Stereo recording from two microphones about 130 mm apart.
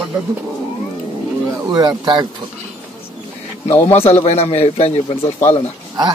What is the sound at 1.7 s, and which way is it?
Speech, 35° right (ahead or behind).